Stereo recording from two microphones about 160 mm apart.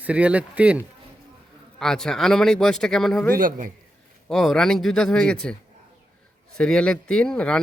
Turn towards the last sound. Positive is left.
turn(degrees=5)  # may be behind; listen again after turning